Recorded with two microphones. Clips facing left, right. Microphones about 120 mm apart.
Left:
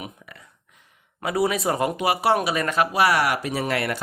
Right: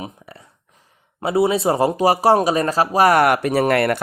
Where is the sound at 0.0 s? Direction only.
30° right (ahead or behind).